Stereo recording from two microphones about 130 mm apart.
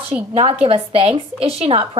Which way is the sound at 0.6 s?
45° right (ahead or behind).